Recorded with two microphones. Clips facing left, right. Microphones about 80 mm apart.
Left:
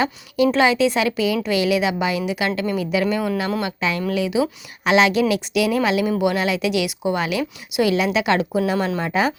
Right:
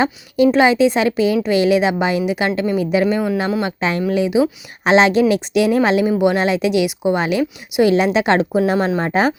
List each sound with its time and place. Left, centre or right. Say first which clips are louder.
0.0 s a woman's voice: right 4 dB; right